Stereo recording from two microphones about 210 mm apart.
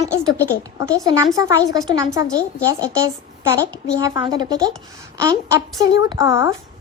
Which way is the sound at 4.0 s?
20° right (ahead or behind).